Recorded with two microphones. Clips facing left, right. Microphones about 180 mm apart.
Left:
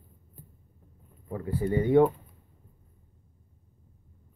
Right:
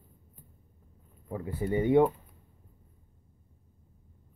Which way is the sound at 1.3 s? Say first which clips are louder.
Left 2 dB; 20° right (ahead or behind).